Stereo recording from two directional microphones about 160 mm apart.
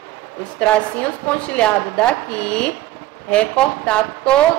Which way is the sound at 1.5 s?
5° left (ahead or behind).